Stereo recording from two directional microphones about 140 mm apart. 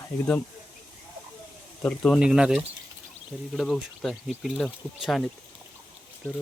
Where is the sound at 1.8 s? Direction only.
5° left (ahead or behind).